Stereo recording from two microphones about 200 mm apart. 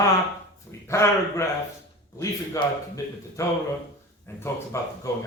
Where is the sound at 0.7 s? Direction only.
15° left (ahead or behind).